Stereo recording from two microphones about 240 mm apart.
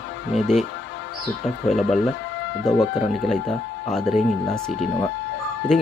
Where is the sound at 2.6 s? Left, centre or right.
Centre.